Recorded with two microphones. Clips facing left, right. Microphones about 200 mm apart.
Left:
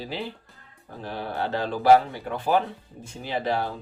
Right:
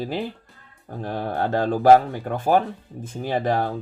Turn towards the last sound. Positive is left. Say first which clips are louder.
# right 4 dB
turn(degrees=-50)  # may be behind; listen again after turning